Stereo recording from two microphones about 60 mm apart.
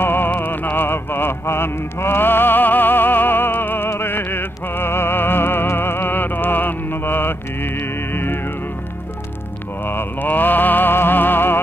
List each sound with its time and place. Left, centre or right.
0.0 s music: left
9.8 s music: left